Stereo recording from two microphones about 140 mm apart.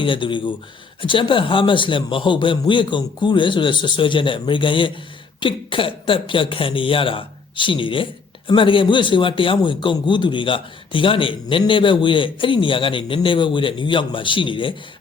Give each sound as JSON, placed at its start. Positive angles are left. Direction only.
{"t": 0.0, "sound": "a man's voice", "side_deg": 35}